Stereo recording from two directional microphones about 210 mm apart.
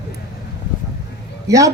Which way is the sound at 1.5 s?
15° right (ahead or behind).